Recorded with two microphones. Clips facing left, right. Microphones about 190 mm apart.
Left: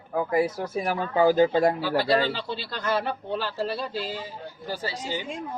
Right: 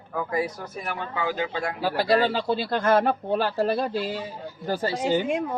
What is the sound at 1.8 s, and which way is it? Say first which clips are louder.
Speech: right 1 dB; 45° right (ahead or behind).